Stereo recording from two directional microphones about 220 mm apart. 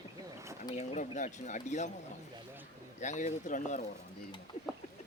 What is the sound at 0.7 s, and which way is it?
Speech, 30° left (ahead or behind).